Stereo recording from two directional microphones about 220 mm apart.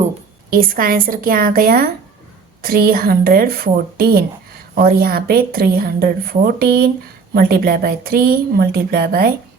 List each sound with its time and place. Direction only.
0.5 s a woman's voice: 40° right (ahead or behind)